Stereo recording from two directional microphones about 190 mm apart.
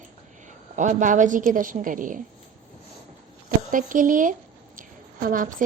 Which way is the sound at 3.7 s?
45° right (ahead or behind).